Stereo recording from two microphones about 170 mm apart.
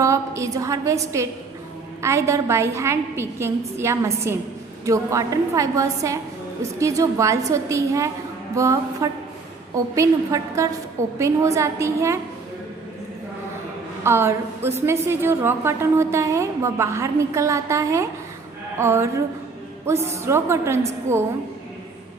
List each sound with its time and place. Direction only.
0.0 s a woman's voice: 20° right (ahead or behind)
14.0 s a woman's voice: 15° right (ahead or behind)